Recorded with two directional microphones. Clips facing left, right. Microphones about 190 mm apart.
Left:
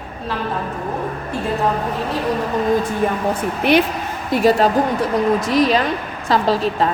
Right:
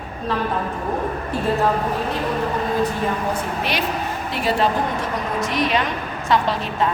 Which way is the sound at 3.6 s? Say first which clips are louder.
Left 9 dB; 55° left (ahead or behind).